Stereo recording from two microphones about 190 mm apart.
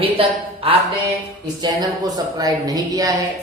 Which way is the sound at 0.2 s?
30° right (ahead or behind).